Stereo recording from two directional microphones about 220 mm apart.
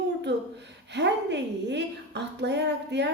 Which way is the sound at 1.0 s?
50° right (ahead or behind).